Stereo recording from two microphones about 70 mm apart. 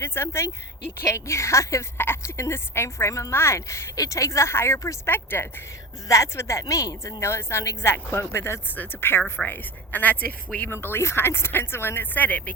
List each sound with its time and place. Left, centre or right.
0.0 s a woman's voice: left
5.1 s speech: left
6.1 s a woman's voice: left
8.7 s speech: left